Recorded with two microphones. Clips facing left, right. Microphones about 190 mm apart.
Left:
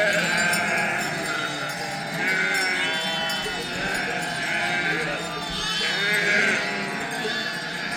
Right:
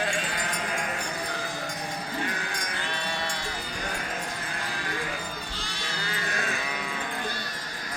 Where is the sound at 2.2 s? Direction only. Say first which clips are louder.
Left 4 dB; 85° left; by 2.8 s 70° left (ahead or behind).